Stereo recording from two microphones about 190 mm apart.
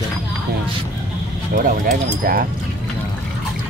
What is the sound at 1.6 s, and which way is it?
Speech, 50° right (ahead or behind).